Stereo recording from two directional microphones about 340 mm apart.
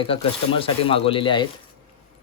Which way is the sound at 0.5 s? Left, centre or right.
Centre.